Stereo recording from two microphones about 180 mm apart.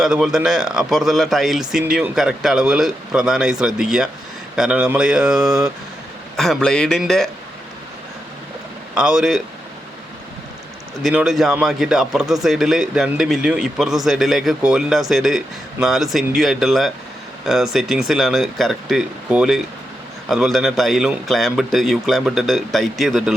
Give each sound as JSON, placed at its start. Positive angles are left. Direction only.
{"t": 0.0, "sound": "a man's voice", "side_deg": -5}
{"t": 9.0, "sound": "a man's voice", "side_deg": -5}
{"t": 11.0, "sound": "a man's voice", "side_deg": -5}